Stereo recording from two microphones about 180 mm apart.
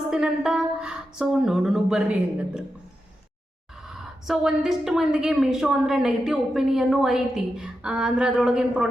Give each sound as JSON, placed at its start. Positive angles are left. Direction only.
{"t": 0.1, "sound": "a woman's voice", "side_deg": -5}
{"t": 3.8, "sound": "a woman's voice", "side_deg": -5}